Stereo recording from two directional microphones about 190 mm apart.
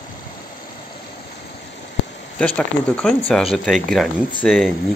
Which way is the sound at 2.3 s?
5° left (ahead or behind).